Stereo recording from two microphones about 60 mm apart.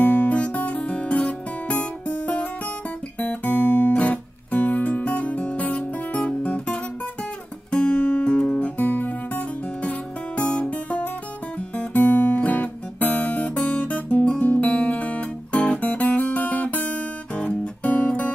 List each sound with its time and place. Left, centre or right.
0.0 s music: left
3.2 s guitar: left
7.7 s music: centre
11.9 s guitar: left